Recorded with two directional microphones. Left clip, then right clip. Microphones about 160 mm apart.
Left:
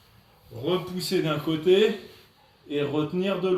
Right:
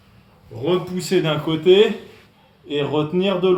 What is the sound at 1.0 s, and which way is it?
A man's voice, 20° right (ahead or behind).